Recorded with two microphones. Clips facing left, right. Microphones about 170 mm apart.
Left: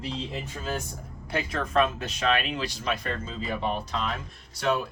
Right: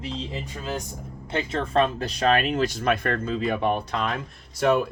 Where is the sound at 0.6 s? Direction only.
15° right (ahead or behind).